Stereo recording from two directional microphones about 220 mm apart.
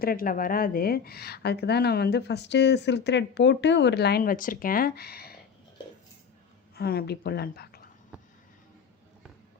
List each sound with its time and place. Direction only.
0.0 s speech: 40° left (ahead or behind)
6.7 s speech: 45° left (ahead or behind)